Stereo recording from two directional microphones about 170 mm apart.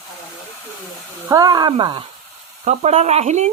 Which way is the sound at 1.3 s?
20° right (ahead or behind).